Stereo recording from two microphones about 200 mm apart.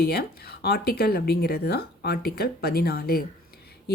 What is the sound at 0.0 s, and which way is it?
A woman's voice, 50° left (ahead or behind).